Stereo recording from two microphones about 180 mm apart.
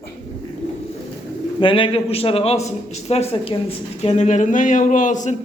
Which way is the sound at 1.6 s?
30° left (ahead or behind).